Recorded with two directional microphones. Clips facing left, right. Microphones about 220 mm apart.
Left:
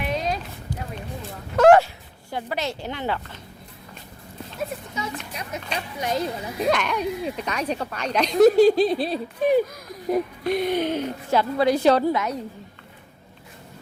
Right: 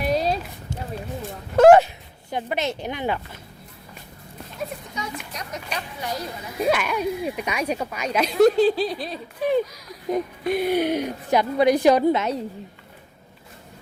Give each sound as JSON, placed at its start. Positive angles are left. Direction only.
{"t": 0.0, "sound": "a sound", "side_deg": -35}
{"t": 2.3, "sound": "a woman's voice", "side_deg": -20}
{"t": 4.9, "sound": "a woman's voice", "side_deg": 5}
{"t": 6.0, "sound": "speech", "side_deg": 20}
{"t": 6.7, "sound": "a woman's voice", "side_deg": -5}
{"t": 8.5, "sound": "speech", "side_deg": 15}
{"t": 10.1, "sound": "a woman's voice", "side_deg": 0}
{"t": 12.1, "sound": "a woman's voice", "side_deg": -25}